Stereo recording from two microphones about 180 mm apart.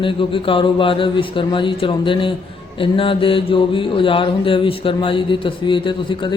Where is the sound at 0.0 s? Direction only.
30° left (ahead or behind).